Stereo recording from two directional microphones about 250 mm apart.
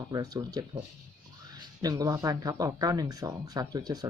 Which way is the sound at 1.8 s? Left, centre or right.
Centre.